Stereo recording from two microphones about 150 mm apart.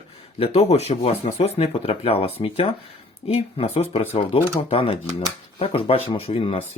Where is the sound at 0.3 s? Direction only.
40° left (ahead or behind).